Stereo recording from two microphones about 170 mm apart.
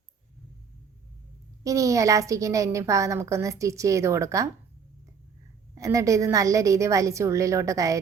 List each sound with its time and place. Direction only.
1.6 s a woman's voice: 20° right (ahead or behind)
5.7 s a woman's voice: 20° right (ahead or behind)